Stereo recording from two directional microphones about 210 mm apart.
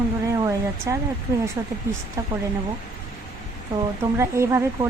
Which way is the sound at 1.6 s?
15° right (ahead or behind).